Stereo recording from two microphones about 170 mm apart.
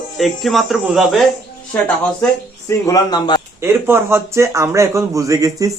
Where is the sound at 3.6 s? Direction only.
15° right (ahead or behind).